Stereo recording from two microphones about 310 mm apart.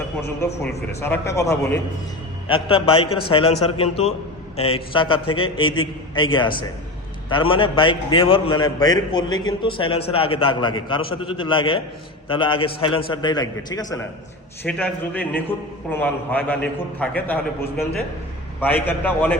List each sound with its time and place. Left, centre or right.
0.2 s a man's voice: centre